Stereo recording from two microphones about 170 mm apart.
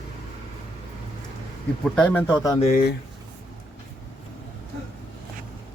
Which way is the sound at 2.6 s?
45° left (ahead or behind).